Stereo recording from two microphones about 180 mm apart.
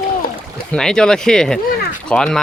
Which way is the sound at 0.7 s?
5° left (ahead or behind).